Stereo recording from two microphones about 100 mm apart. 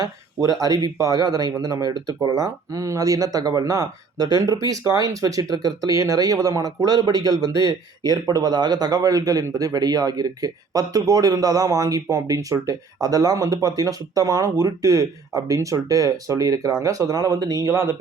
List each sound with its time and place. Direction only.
0.4 s speech: 40° right (ahead or behind)